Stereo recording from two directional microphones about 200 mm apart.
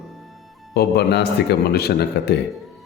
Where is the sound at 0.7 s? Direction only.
55° left (ahead or behind).